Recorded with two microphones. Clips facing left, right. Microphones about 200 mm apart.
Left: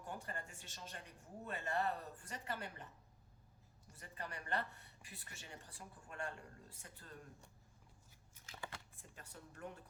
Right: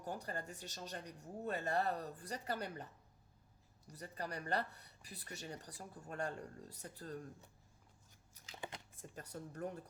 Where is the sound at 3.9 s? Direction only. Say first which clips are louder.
Right 5 dB; 40° right (ahead or behind).